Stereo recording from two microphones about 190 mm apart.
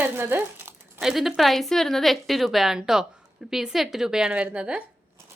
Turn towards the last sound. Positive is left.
turn(degrees=-5)  # may be behind; listen again after turning